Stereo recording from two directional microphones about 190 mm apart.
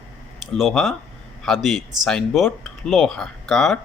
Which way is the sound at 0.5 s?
Centre (ahead or behind).